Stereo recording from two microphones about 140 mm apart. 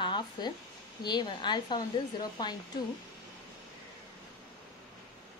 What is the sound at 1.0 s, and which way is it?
Speech, 30° left (ahead or behind).